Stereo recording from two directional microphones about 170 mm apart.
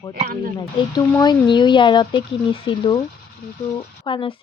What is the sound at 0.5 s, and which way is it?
Speech, 25° left (ahead or behind).